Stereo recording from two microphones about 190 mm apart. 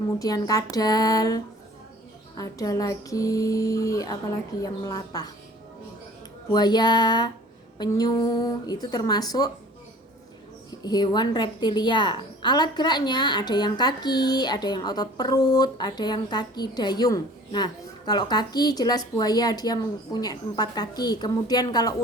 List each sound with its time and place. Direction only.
0.2 s a woman's voice: 20° left (ahead or behind)
2.4 s a woman's voice: 20° left (ahead or behind)
6.5 s a woman's voice: 20° left (ahead or behind)
10.7 s a woman's voice: 20° left (ahead or behind)